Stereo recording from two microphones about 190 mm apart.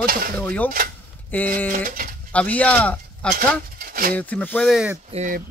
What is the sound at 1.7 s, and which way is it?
Speech, 45° right (ahead or behind).